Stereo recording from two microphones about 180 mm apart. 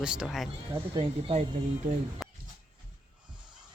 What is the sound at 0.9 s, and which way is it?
Speech, 30° right (ahead or behind).